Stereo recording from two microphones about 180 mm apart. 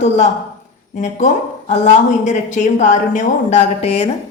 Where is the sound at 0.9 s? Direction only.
40° left (ahead or behind).